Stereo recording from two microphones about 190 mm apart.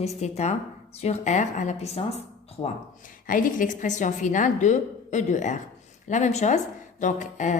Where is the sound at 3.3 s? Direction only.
45° left (ahead or behind).